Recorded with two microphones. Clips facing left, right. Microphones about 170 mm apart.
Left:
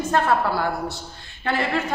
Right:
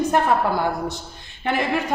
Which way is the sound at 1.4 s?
15° right (ahead or behind).